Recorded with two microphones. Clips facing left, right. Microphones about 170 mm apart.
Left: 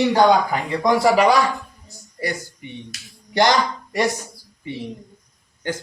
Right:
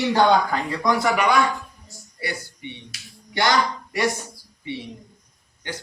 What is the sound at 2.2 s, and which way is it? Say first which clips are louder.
Speech: left 4 dB; 45° left (ahead or behind).